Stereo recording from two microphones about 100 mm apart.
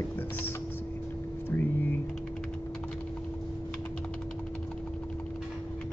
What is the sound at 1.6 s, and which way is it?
Speech, 20° left (ahead or behind).